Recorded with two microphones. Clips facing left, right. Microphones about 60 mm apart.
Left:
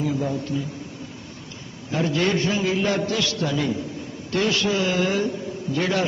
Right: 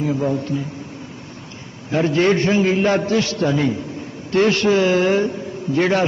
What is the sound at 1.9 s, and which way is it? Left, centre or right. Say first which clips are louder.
A man's voice: right 6 dB; right.